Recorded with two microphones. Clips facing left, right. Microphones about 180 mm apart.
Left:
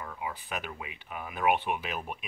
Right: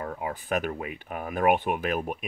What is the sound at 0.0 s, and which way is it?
Speech, 50° right (ahead or behind).